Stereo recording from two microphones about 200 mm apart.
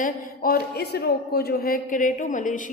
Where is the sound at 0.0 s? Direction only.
45° left (ahead or behind).